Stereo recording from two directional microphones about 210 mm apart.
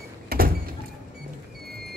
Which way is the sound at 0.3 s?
45° right (ahead or behind).